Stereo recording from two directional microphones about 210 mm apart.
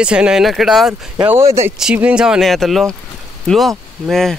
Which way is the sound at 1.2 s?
15° right (ahead or behind).